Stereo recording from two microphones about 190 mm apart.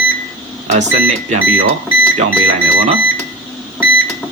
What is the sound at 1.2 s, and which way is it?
Speech, 30° right (ahead or behind).